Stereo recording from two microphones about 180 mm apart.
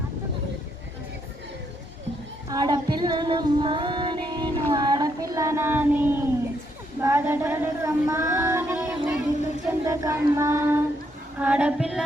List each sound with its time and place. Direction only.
2.5 s female singing: 20° right (ahead or behind)
7.0 s child singing: 15° right (ahead or behind)